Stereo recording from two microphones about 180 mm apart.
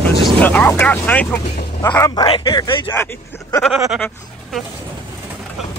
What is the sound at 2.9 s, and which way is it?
Speech, 15° left (ahead or behind).